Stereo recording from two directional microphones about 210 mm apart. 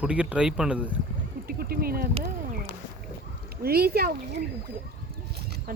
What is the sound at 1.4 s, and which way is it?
Speech, 45° right (ahead or behind).